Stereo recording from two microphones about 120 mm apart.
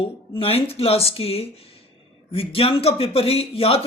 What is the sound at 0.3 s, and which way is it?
Speech, 55° left (ahead or behind).